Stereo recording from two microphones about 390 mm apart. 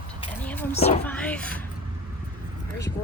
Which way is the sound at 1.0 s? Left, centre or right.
Centre.